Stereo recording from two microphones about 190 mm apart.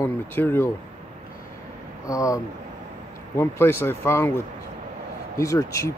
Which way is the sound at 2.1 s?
15° left (ahead or behind).